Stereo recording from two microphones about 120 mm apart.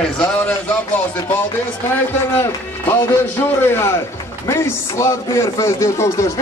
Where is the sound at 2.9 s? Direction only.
20° left (ahead or behind).